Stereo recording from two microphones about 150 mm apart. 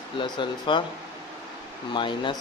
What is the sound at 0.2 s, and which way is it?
Speech, 30° left (ahead or behind).